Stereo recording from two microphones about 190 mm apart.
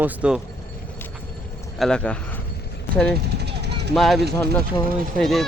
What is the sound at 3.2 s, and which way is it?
Vehicle, 60° right (ahead or behind).